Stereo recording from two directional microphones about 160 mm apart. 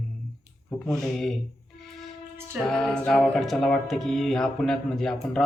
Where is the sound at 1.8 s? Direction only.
Centre (ahead or behind).